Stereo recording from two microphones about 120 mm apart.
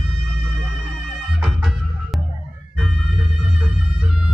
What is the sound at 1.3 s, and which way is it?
Music, 5° right (ahead or behind).